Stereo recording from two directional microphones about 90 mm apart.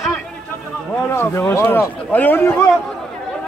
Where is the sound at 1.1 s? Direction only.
25° left (ahead or behind).